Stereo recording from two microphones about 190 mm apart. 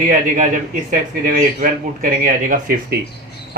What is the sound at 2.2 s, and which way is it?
Speech, 45° right (ahead or behind).